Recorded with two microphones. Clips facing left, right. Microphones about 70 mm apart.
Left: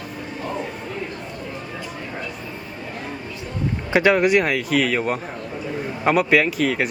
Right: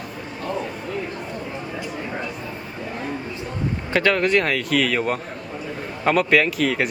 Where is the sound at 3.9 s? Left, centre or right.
Centre.